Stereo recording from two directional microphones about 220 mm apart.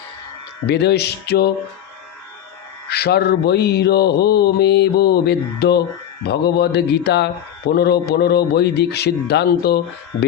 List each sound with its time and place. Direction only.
0.7 s mantra: 50° left (ahead or behind)
2.9 s mantra: 45° left (ahead or behind)